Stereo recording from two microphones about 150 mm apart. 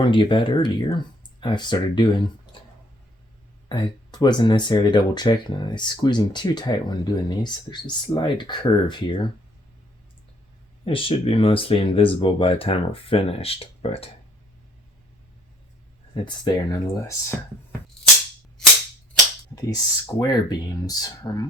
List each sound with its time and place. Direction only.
0.0 s speech: 30° left (ahead or behind)
3.7 s speech: 30° left (ahead or behind)
10.8 s speech: 35° left (ahead or behind)
16.1 s speech: 30° left (ahead or behind)
19.5 s speech: 25° left (ahead or behind)